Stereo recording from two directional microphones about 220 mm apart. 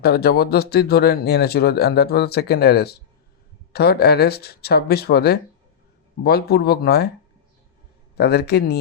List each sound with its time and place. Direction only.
0.0 s speech: 45° left (ahead or behind)
8.1 s speech: 45° left (ahead or behind)